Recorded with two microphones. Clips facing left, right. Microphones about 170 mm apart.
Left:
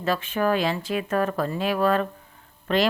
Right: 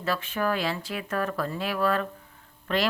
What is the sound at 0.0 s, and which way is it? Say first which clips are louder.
A woman's voice: left 4 dB; 20° left (ahead or behind).